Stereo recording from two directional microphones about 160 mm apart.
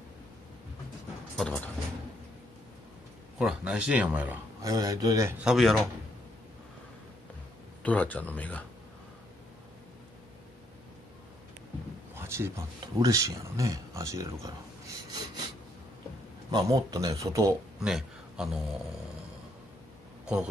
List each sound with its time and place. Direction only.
1.3 s speech: 5° left (ahead or behind)
3.3 s a man's voice: 5° right (ahead or behind)
4.6 s speech: 20° right (ahead or behind)
5.4 s speech: centre (ahead or behind)
7.8 s speech: 10° left (ahead or behind)
12.2 s speech: 15° right (ahead or behind)
15.0 s rub: 25° right (ahead or behind)
16.4 s speech: 25° right (ahead or behind)
17.7 s a sound: 5° right (ahead or behind)